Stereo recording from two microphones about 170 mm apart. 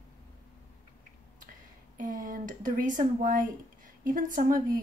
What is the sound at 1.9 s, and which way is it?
Speech, 50° right (ahead or behind).